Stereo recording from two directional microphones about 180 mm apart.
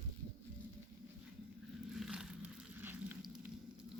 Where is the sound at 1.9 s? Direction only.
Centre (ahead or behind).